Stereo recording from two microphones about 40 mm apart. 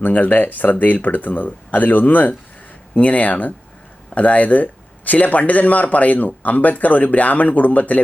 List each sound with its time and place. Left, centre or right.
0.0 s speech: left